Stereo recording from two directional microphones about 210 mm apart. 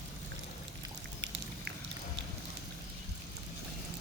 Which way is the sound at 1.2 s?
55° right (ahead or behind).